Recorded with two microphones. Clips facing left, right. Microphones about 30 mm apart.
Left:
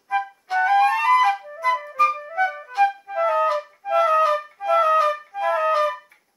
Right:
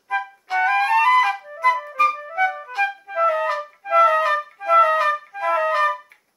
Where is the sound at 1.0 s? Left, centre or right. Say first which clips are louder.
Right 1 dB; centre.